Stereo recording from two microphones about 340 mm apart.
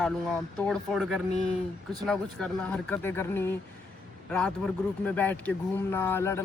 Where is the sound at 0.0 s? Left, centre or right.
Centre.